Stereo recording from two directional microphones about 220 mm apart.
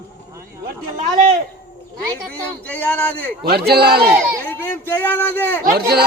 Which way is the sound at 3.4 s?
45° right (ahead or behind).